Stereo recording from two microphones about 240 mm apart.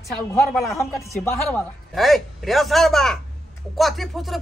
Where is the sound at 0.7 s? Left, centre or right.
Centre.